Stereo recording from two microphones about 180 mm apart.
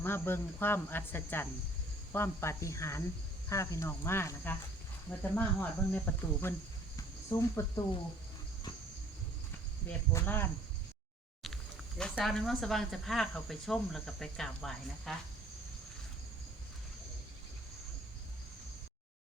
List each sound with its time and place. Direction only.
0.0 s speech: 10° left (ahead or behind)
6.9 s a sound: 15° left (ahead or behind)
10.1 s speech: 15° left (ahead or behind)